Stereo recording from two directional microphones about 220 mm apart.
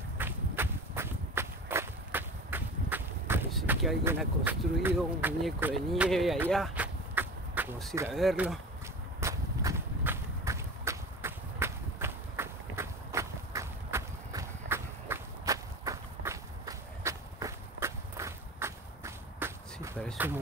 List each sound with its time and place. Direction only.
0.2 s walk: 10° right (ahead or behind)
4.4 s speech: 10° right (ahead or behind)
8.1 s speech: centre (ahead or behind)
9.2 s run: 15° right (ahead or behind)